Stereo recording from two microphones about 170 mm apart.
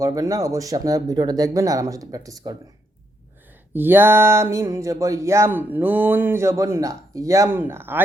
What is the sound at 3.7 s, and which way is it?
Speech, 10° right (ahead or behind).